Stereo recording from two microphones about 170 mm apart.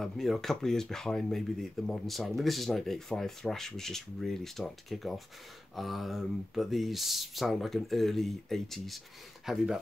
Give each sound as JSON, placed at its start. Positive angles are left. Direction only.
{"t": 0.0, "sound": "speech", "side_deg": 0}